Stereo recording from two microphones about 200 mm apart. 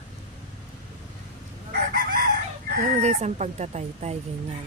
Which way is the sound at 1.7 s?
45° right (ahead or behind).